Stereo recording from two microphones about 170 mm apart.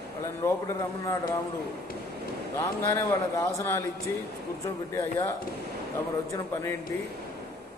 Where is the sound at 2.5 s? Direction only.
15° left (ahead or behind).